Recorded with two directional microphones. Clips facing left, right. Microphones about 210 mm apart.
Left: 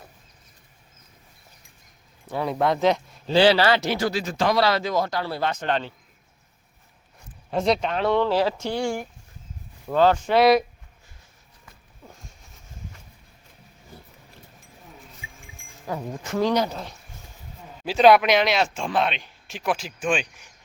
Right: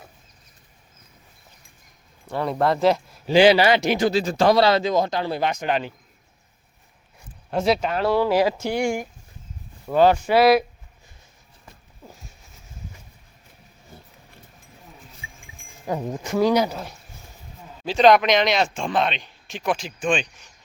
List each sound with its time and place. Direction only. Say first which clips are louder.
2.2 s speech: right 1 dB; centre (ahead or behind)
3.3 s speech: right 3 dB; 15° right (ahead or behind)
4.2 s speech: right 5 dB; 35° right (ahead or behind); by 5.9 s 10° right (ahead or behind)
7.5 s speech: right 1 dB; 5° right (ahead or behind)
15.9 s speech: right 4 dB; 20° right (ahead or behind)
17.8 s speech: even; 5° left (ahead or behind)